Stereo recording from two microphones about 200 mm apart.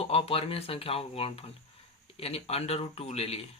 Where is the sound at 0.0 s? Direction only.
30° left (ahead or behind).